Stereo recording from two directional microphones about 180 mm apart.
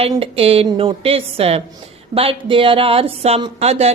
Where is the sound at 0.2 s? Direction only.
30° right (ahead or behind).